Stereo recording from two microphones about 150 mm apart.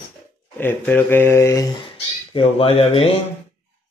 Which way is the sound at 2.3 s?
40° left (ahead or behind).